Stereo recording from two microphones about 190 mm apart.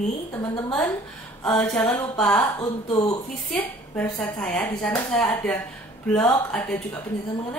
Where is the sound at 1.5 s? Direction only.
5° left (ahead or behind).